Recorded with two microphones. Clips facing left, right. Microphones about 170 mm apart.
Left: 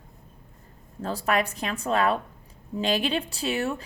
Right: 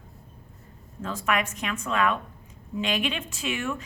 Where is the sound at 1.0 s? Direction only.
35° left (ahead or behind).